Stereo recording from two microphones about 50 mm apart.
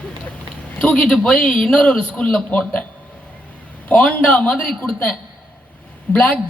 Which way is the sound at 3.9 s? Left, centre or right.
Left.